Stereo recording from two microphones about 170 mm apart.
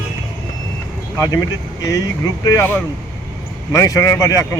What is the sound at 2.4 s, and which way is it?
Speech, 15° left (ahead or behind).